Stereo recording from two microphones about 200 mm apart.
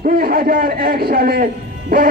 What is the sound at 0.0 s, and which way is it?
A man's voice, 45° right (ahead or behind).